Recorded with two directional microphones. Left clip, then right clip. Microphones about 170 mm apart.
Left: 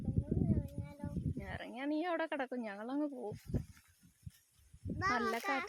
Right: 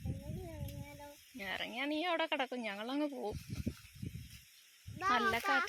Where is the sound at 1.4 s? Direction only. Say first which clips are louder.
Right 8 dB; 15° left (ahead or behind).